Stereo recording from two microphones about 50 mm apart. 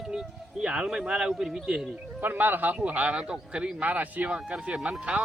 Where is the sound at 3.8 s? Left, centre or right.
Right.